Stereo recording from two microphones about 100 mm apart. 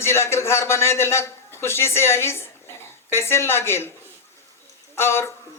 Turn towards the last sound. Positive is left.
turn(degrees=25)  # may be behind; listen again after turning